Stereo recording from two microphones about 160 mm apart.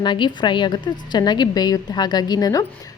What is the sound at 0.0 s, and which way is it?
A woman's voice, 30° left (ahead or behind).